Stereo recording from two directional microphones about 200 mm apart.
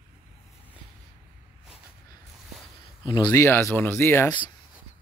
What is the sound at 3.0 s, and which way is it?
Speech, 20° left (ahead or behind).